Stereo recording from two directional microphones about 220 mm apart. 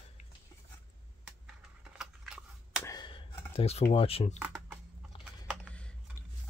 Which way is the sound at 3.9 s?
25° left (ahead or behind).